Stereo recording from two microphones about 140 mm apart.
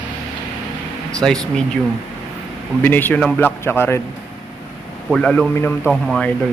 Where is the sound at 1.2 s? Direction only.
5° left (ahead or behind).